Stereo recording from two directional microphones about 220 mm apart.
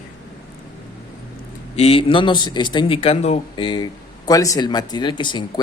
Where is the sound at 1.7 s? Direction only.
25° left (ahead or behind).